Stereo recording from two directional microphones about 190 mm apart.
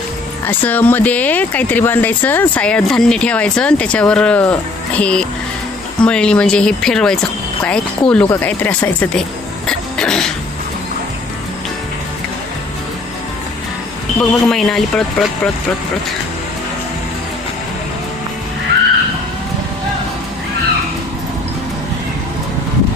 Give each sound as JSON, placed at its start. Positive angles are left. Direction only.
{"t": 0.4, "sound": "speech", "side_deg": 10}
{"t": 9.6, "sound": "a sound", "side_deg": 5}
{"t": 14.2, "sound": "speech", "side_deg": 0}